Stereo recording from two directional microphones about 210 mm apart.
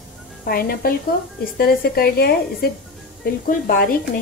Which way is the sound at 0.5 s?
45° left (ahead or behind).